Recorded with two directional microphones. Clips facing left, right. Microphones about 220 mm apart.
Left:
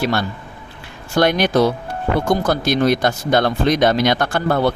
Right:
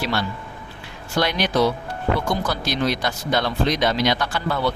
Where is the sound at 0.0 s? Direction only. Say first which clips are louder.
Left 5 dB; 50° left (ahead or behind).